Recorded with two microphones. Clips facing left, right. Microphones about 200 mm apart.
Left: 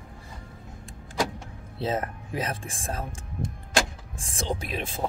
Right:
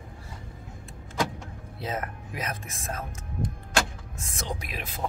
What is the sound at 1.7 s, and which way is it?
Speech, 30° left (ahead or behind).